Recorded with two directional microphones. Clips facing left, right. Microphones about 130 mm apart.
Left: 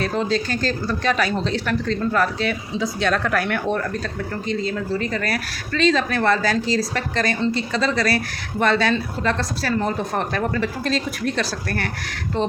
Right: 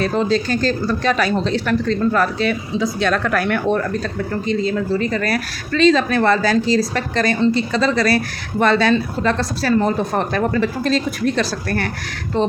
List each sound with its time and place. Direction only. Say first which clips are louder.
0.0 s a woman's voice: right 4 dB; 35° right (ahead or behind)
3.0 s speech: right 1 dB; 60° right (ahead or behind)
5.1 s a woman's voice: right 4 dB; 35° right (ahead or behind)